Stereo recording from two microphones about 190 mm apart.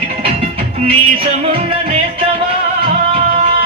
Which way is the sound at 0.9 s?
30° right (ahead or behind).